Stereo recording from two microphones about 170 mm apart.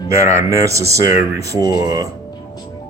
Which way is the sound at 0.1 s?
15° right (ahead or behind).